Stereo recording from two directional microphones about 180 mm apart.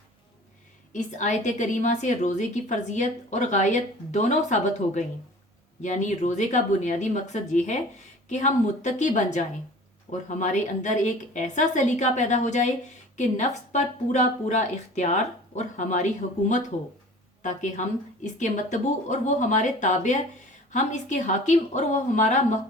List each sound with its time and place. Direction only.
0.9 s a woman's voice: 40° left (ahead or behind)
5.8 s a woman's voice: 40° left (ahead or behind)